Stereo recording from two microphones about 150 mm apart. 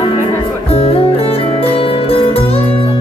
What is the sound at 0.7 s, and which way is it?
Music, 40° left (ahead or behind).